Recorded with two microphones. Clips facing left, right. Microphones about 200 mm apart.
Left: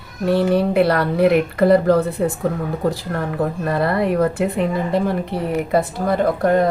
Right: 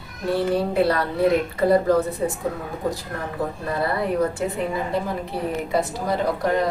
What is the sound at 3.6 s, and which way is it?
A woman's voice, 65° left (ahead or behind).